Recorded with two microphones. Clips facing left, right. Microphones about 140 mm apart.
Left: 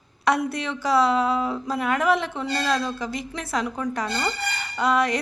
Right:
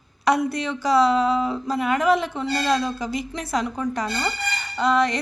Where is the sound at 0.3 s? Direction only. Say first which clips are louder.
Right 2 dB; centre (ahead or behind).